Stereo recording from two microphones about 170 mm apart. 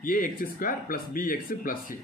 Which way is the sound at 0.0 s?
55° left (ahead or behind).